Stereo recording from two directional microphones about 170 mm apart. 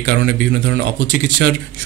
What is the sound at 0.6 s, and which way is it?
Speech, 85° right.